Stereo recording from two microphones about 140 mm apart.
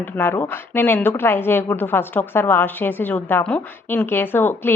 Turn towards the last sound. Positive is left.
turn(degrees=15)  # may be behind; listen again after turning